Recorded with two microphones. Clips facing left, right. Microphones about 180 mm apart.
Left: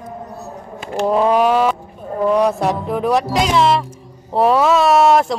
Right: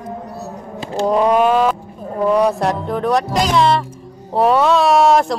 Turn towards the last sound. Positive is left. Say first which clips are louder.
# even
turn(degrees=0)  # may be behind; listen again after turning